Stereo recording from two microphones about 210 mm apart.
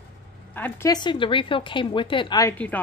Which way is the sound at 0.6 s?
10° left (ahead or behind).